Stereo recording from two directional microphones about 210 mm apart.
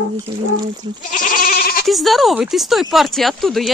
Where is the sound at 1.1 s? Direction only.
40° left (ahead or behind).